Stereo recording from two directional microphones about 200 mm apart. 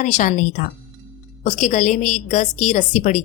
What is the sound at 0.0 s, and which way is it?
A woman's voice, 40° left (ahead or behind).